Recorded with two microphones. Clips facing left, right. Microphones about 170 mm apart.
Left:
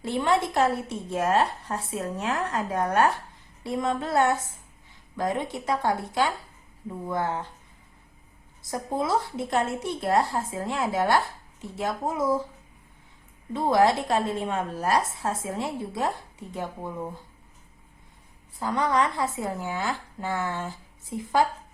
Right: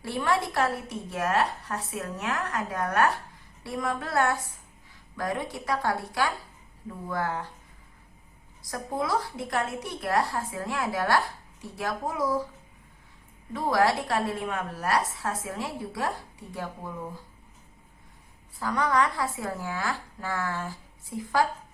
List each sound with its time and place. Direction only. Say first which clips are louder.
0.0 s a woman's voice: left 3 dB; 20° left (ahead or behind)
8.7 s a woman's voice: left 2 dB; 25° left (ahead or behind)
13.5 s a woman's voice: left 3 dB; 25° left (ahead or behind)
18.6 s a woman's voice: left 1 dB; 25° left (ahead or behind)